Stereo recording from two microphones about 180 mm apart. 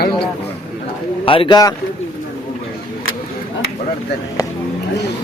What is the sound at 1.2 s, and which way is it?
Speech, 30° left (ahead or behind).